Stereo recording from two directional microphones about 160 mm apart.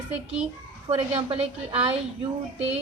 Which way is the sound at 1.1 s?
35° right (ahead or behind).